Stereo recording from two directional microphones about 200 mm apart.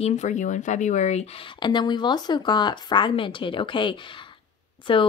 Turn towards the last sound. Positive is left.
turn(degrees=25)  # may be behind; listen again after turning